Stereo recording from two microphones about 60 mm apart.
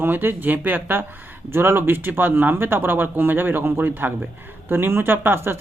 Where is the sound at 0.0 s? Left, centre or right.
Right.